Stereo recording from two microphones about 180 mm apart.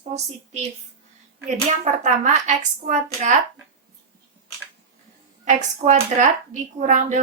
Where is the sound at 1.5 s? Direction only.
40° right (ahead or behind).